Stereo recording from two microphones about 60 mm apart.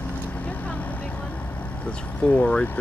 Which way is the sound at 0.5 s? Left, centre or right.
Left.